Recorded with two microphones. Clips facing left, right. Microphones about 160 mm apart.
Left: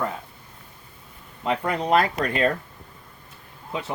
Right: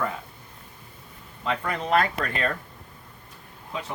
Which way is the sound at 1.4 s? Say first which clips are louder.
Left 3 dB; 10° left (ahead or behind).